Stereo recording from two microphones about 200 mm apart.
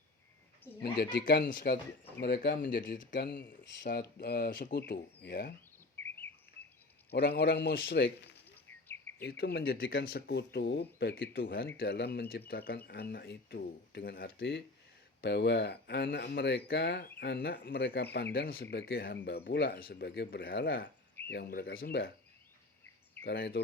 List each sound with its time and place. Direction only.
0.8 s speech: 55° left (ahead or behind)
6.0 s chirp: 10° left (ahead or behind)
7.1 s speech: 55° left (ahead or behind)
8.6 s cricket: 10° left (ahead or behind)
9.2 s speech: 55° left (ahead or behind)
23.2 s speech: 55° left (ahead or behind)